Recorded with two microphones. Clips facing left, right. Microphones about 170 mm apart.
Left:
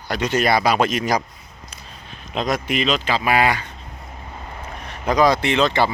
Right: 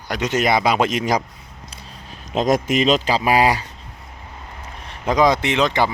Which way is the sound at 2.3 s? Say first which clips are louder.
Right 4 dB; 45° right (ahead or behind).